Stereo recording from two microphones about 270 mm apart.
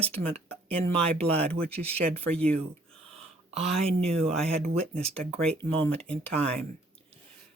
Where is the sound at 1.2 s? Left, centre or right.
Right.